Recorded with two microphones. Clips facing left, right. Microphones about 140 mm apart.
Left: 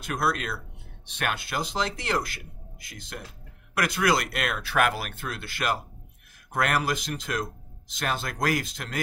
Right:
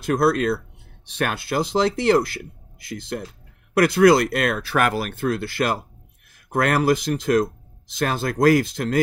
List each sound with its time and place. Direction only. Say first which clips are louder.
0.0 s speech: right 9 dB; 35° right (ahead or behind)